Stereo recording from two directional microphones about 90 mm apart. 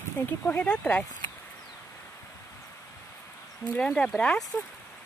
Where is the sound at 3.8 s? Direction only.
10° left (ahead or behind).